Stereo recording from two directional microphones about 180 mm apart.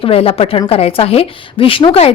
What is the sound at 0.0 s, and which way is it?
A woman's voice, 30° left (ahead or behind).